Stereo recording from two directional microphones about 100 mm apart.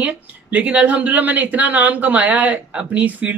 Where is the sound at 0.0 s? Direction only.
15° right (ahead or behind).